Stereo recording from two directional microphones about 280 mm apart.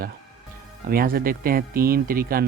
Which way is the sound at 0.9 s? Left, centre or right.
Right.